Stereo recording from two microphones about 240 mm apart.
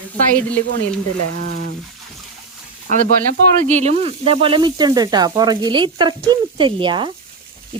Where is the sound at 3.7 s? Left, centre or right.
Right.